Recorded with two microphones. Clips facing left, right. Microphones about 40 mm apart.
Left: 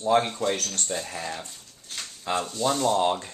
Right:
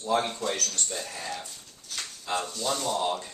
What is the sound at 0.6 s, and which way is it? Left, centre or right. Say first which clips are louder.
Speech: left 1 dB; left.